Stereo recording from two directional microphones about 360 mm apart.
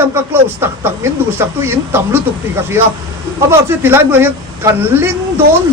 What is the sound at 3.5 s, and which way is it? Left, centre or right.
A man's voice, centre.